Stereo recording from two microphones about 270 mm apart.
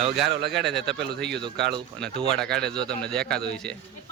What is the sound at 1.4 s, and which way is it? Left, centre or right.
Speech, centre.